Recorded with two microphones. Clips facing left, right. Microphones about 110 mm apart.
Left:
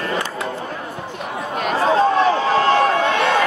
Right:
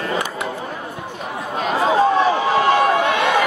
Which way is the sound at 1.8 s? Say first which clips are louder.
Even; 10° right (ahead or behind).